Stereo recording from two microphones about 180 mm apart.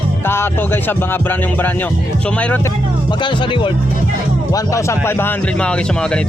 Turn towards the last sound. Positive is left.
turn(degrees=10)  # may be behind; listen again after turning